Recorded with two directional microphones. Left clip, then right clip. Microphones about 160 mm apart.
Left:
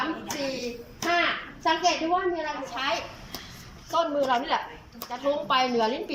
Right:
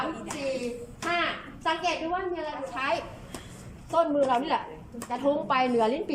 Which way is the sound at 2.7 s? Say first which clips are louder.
Right 1 dB; 5° right (ahead or behind).